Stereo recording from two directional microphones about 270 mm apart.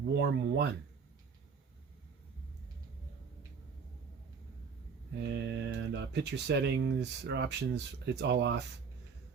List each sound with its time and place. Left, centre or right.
0.1 s speech: right
5.3 s speech: right